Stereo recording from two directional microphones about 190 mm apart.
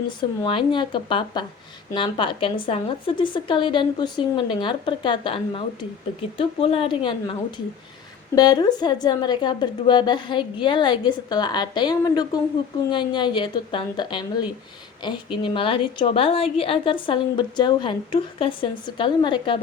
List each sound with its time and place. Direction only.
0.2 s a woman's voice: 25° left (ahead or behind)
8.4 s a woman's voice: 20° left (ahead or behind)